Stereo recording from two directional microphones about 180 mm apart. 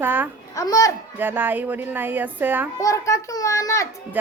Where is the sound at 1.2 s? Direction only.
10° right (ahead or behind).